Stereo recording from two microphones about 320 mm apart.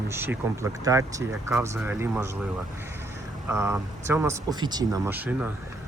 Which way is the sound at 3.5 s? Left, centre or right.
Centre.